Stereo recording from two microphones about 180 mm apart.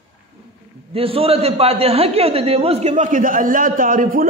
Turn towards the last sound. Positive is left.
turn(degrees=-50)  # may be behind; listen again after turning